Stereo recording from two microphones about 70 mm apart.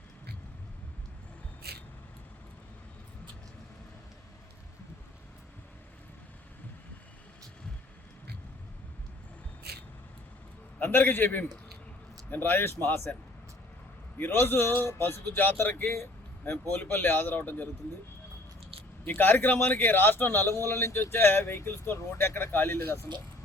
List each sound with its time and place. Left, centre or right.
10.8 s a man's voice: left
14.2 s a man's voice: left
19.0 s a man's voice: left